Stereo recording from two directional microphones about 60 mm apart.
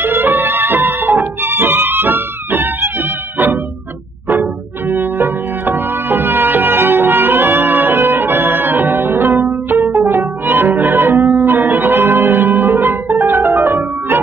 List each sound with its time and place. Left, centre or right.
0.0 s music: right
4.8 s music: right
13.2 s music: right